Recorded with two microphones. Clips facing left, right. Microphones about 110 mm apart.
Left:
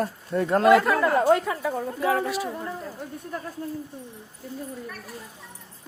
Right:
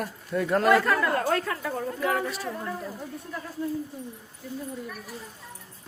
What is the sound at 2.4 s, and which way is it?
Speech, 20° left (ahead or behind).